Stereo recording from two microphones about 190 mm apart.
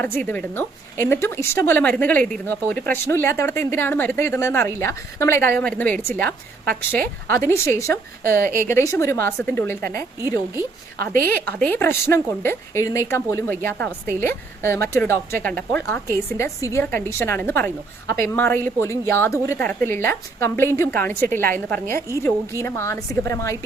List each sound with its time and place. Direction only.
0.0 s a woman's voice: 10° left (ahead or behind)
8.2 s speech: 50° right (ahead or behind)
8.7 s a woman's voice: 15° left (ahead or behind)
11.0 s speech: 50° right (ahead or behind)
11.4 s a woman's voice: 10° left (ahead or behind)